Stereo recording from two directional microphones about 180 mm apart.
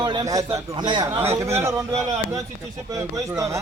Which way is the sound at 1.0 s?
15° right (ahead or behind).